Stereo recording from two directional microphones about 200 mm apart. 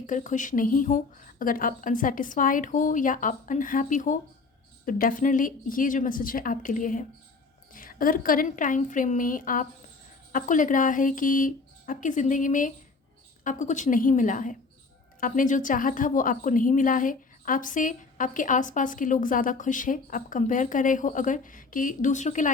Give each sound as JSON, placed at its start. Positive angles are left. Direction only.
{"t": 0.0, "sound": "a woman's voice", "side_deg": 40}